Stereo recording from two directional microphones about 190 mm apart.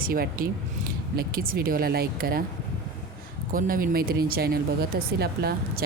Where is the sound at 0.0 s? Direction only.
50° right (ahead or behind).